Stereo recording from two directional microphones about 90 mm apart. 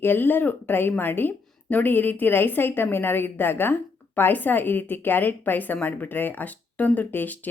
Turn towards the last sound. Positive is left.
turn(degrees=20)  # may be behind; listen again after turning